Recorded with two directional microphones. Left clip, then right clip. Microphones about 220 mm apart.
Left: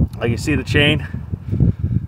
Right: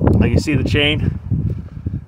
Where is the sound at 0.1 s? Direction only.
Centre (ahead or behind).